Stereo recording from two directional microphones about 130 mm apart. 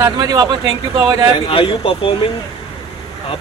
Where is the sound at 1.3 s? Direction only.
40° left (ahead or behind).